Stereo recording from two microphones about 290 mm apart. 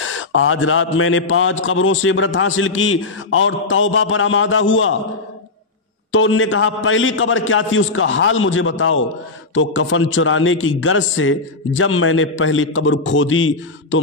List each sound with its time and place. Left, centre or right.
0.0 s a man's voice: left
6.1 s a man's voice: left